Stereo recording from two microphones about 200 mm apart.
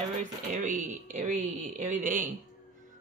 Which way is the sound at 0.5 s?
40° right (ahead or behind).